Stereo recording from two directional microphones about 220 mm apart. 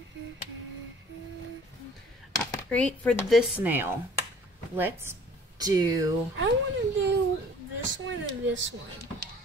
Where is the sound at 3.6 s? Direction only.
10° right (ahead or behind).